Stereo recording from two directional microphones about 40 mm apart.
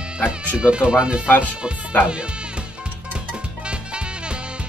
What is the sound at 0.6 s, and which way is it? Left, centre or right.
Speech, right.